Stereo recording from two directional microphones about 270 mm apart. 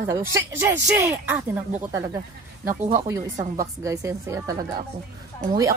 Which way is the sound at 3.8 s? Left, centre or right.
Centre.